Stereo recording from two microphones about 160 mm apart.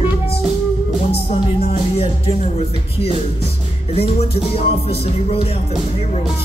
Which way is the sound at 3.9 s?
40° left (ahead or behind).